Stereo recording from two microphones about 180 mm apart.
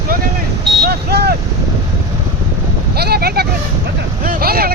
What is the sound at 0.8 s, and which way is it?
Vehicle, 65° right (ahead or behind).